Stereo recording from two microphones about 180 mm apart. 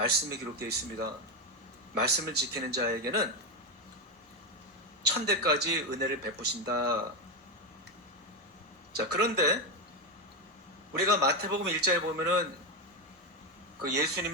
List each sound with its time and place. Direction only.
0.0 s speech: 60° right (ahead or behind)
5.1 s speech: 65° right (ahead or behind)
9.0 s speech: 65° right (ahead or behind)
10.9 s speech: 60° right (ahead or behind)
13.8 s speech: 65° right (ahead or behind)